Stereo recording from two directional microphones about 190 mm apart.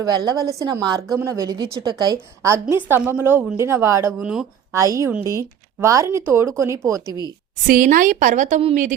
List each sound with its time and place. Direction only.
0.0 s a woman's voice: 20° right (ahead or behind)
4.2 s speech: 5° right (ahead or behind)
4.7 s speech: 15° right (ahead or behind)
7.7 s a woman's voice: 45° right (ahead or behind)